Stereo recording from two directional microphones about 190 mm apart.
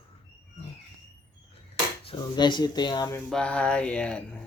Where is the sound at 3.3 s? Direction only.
5° left (ahead or behind).